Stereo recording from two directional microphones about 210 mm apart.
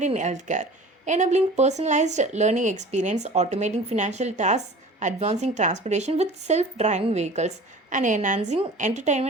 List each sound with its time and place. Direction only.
0.0 s a woman's voice: 35° right (ahead or behind)